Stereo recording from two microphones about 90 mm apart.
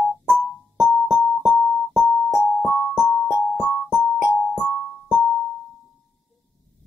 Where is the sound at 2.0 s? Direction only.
5° left (ahead or behind).